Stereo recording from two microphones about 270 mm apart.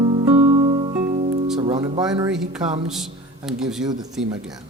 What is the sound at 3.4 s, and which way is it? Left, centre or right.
Speech, centre.